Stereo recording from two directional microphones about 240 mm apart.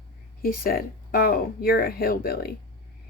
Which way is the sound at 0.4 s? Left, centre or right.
Left.